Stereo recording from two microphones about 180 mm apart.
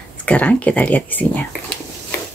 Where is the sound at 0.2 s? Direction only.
5° left (ahead or behind).